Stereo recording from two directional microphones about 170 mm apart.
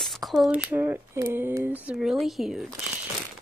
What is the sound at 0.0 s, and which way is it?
Speech, centre (ahead or behind).